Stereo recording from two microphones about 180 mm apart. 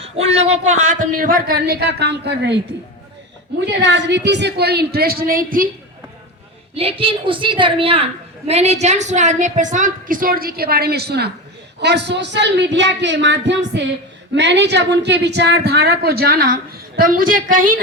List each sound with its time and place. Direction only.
0.0 s a man's voice: 35° right (ahead or behind); by 2.6 s 70° right (ahead or behind)
3.7 s a woman's voice: 80° right; by 5.6 s 50° right (ahead or behind)
6.7 s a woman's voice: 30° right (ahead or behind); by 17.7 s 50° right (ahead or behind)